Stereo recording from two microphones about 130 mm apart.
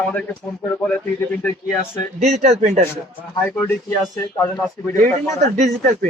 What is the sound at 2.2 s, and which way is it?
Speech, 60° right (ahead or behind).